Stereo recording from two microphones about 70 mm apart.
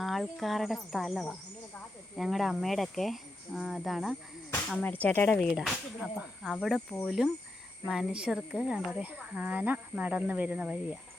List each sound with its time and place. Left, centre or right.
0.0 s speech: centre
4.8 s speech: left
5.5 s speech: centre
7.2 s speech: centre
9.0 s speech: centre